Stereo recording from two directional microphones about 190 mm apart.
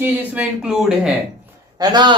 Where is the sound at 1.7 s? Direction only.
20° right (ahead or behind).